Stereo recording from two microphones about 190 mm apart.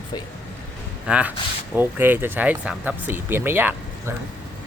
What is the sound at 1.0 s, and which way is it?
Speech, 5° right (ahead or behind).